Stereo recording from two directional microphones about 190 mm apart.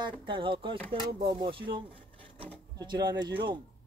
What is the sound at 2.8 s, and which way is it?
Speech, 20° right (ahead or behind).